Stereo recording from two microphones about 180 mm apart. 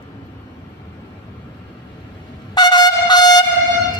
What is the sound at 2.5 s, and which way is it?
Shofar, 20° left (ahead or behind).